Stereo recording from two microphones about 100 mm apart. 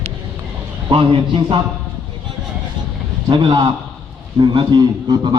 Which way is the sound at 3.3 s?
50° right (ahead or behind).